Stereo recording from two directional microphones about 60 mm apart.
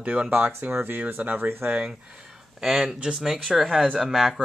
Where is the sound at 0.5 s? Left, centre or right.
Right.